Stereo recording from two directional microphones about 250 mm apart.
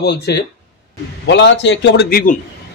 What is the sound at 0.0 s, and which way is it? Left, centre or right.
A man's voice, left.